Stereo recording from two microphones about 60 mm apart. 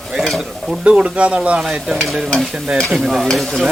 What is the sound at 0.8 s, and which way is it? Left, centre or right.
Stir, centre.